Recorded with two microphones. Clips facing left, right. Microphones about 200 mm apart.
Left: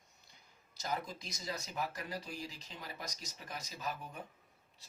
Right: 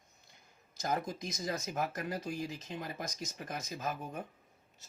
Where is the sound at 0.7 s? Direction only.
45° right (ahead or behind).